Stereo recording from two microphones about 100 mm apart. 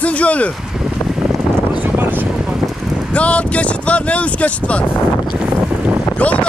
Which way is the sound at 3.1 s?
15° left (ahead or behind).